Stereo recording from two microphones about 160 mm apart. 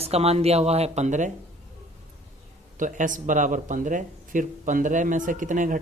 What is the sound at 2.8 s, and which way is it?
Speech, 55° right (ahead or behind).